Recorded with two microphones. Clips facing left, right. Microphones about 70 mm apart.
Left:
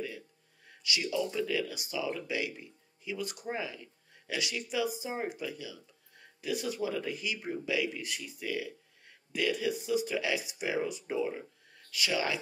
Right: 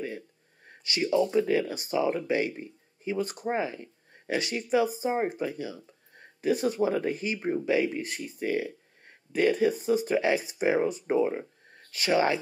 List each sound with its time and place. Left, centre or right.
0.7 s speech: right